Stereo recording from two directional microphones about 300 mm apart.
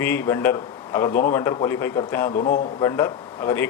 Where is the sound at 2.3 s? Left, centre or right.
Left.